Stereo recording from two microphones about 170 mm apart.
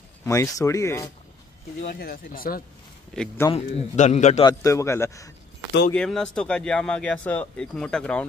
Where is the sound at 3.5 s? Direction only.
40° left (ahead or behind).